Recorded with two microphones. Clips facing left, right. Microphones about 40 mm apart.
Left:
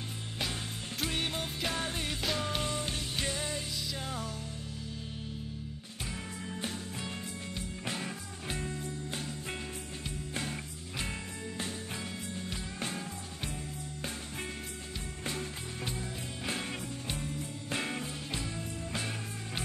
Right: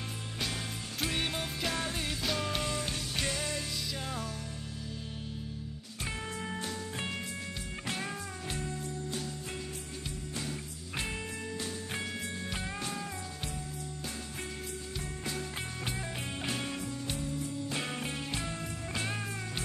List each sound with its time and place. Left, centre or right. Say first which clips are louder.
0.9 s music: right 1 dB; centre
1.6 s music: even; centre
4.0 s music: even; centre
8.5 s music: left 2 dB; centre
10.3 s music: left 2 dB; left
17.2 s music: right 3 dB; left